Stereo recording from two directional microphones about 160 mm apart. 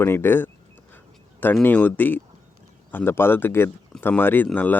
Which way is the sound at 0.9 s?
10° left (ahead or behind).